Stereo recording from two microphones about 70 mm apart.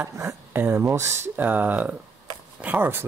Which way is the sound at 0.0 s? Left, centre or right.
Right.